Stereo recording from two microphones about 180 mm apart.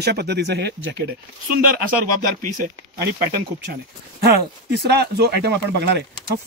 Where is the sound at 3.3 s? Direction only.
60° right (ahead or behind).